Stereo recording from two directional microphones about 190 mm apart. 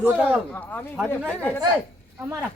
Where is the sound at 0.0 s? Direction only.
5° right (ahead or behind).